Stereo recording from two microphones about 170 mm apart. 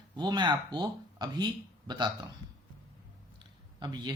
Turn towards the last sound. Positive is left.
turn(degrees=-25)  # may be behind; listen again after turning